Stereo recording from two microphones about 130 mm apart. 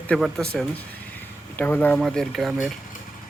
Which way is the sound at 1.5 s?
15° left (ahead or behind).